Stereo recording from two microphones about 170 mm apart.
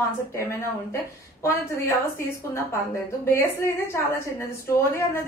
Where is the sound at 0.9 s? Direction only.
15° left (ahead or behind).